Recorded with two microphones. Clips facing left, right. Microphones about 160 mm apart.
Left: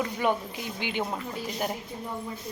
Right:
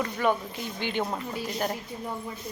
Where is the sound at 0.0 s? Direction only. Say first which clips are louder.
Right 1 dB; 10° left (ahead or behind).